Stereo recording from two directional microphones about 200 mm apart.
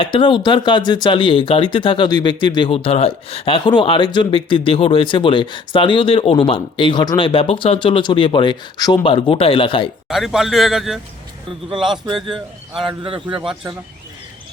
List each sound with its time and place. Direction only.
0.0 s speech: 25° left (ahead or behind)
10.1 s a man's voice: centre (ahead or behind)
12.0 s a man's voice: 25° right (ahead or behind)